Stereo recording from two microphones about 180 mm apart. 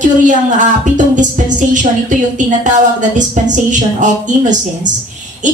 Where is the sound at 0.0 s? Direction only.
45° right (ahead or behind).